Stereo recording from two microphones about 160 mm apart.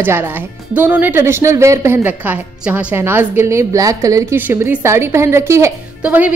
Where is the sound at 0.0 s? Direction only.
15° right (ahead or behind).